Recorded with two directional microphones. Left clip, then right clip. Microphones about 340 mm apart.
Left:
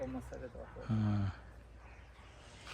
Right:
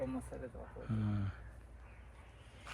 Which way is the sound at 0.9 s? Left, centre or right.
Centre.